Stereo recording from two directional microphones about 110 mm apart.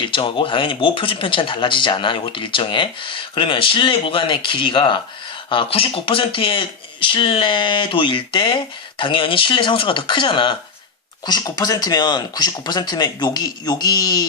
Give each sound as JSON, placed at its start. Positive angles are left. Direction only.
{"t": 0.0, "sound": "speech", "side_deg": 50}